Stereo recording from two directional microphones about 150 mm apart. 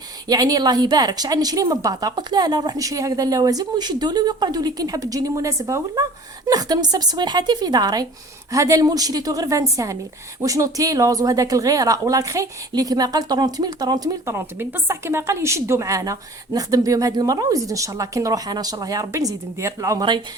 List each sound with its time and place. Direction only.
0.3 s a woman's voice: 25° right (ahead or behind)